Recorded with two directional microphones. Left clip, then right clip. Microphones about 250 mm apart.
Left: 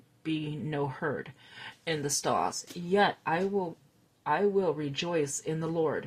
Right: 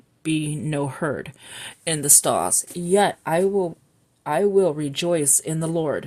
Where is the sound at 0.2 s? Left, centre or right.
Right.